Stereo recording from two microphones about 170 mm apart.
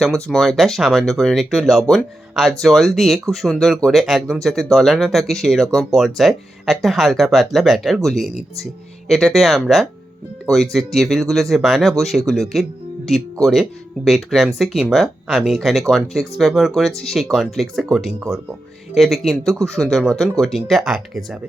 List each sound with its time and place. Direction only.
0.0 s speech: centre (ahead or behind)
18.9 s speech: centre (ahead or behind)